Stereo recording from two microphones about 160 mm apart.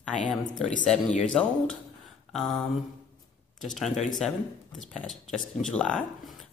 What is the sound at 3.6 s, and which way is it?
A woman's voice, centre (ahead or behind).